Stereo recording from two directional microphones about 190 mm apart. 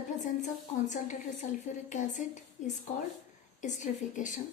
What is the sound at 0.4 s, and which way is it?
A woman's voice, 40° left (ahead or behind).